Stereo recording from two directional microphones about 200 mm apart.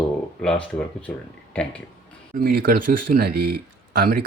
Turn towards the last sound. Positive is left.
turn(degrees=-50)  # may be behind; listen again after turning